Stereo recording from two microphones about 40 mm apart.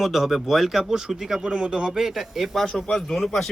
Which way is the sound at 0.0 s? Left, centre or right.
Centre.